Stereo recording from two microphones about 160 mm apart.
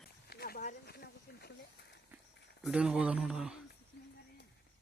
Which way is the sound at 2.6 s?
5° right (ahead or behind).